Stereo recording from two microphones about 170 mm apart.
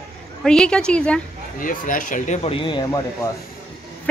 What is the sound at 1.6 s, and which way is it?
Speech, 55° left (ahead or behind).